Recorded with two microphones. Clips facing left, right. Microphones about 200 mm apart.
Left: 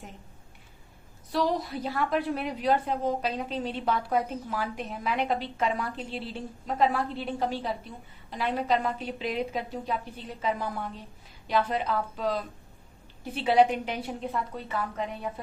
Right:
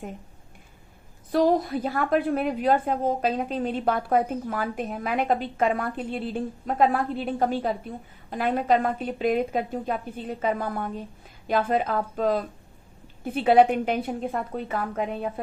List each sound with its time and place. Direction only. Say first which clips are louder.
1.3 s a woman's voice: right 7 dB; 50° right (ahead or behind)